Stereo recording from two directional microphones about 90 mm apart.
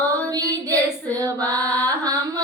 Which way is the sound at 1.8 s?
40° right (ahead or behind).